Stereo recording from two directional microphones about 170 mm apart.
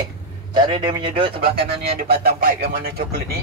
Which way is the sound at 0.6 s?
30° right (ahead or behind).